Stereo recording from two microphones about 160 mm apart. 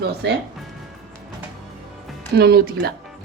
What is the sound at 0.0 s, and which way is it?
Speech, 90° right.